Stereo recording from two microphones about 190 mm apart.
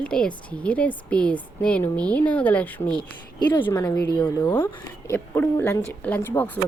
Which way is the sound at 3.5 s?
25° left (ahead or behind).